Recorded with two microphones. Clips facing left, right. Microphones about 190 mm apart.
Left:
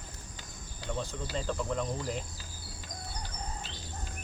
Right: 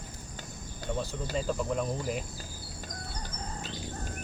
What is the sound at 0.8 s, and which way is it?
Cricket, 45° right (ahead or behind).